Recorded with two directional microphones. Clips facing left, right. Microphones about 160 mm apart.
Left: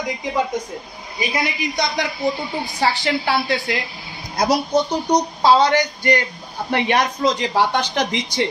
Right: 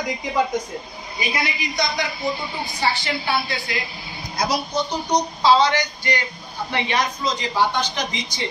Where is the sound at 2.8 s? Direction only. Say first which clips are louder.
Left 4 dB; 90° left.